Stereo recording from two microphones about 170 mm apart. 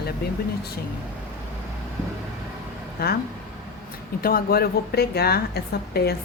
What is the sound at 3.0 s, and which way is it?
Speech, 65° left (ahead or behind).